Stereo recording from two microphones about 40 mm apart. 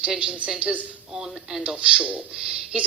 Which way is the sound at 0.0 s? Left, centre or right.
Right.